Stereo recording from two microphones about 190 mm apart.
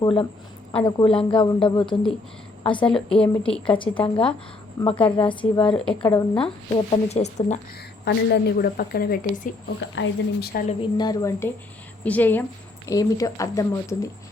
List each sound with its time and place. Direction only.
0.0 s speech: 30° left (ahead or behind)
3.1 s speech: 5° left (ahead or behind)
3.7 s speech: 25° left (ahead or behind)
7.1 s speech: 35° left (ahead or behind)
8.1 s a woman's voice: 65° left (ahead or behind)
8.5 s speech: 50° left (ahead or behind)
9.8 s speech: 75° left (ahead or behind)
10.7 s speech: 25° left (ahead or behind)